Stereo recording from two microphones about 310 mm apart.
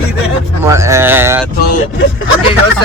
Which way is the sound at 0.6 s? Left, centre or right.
Centre.